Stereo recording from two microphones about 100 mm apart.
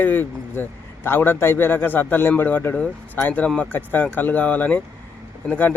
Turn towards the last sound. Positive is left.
turn(degrees=15)  # may be behind; listen again after turning